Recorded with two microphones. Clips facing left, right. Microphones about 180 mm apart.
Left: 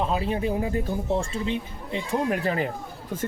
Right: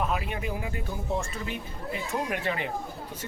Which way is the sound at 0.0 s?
30° left (ahead or behind).